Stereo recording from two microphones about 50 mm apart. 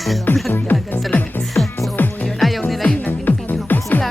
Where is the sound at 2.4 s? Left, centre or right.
Centre.